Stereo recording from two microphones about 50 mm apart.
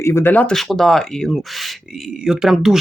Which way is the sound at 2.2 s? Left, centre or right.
Centre.